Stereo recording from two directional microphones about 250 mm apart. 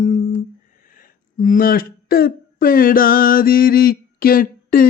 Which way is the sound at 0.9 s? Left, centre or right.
Left.